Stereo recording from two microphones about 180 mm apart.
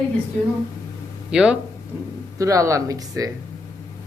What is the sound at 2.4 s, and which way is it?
Speech, 15° right (ahead or behind).